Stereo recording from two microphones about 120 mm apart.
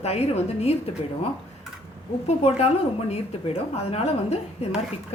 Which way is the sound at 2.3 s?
60° left (ahead or behind).